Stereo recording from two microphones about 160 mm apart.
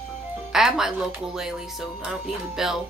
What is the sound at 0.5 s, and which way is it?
Speech, 5° right (ahead or behind).